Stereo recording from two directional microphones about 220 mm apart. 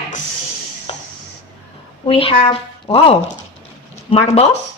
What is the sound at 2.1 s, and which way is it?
A woman's voice, 25° left (ahead or behind).